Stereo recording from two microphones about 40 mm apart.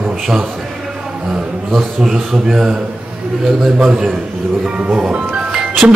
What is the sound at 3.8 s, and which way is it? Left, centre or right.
A man's voice, centre.